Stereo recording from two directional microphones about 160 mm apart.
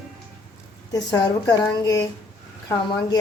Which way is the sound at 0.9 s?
25° left (ahead or behind).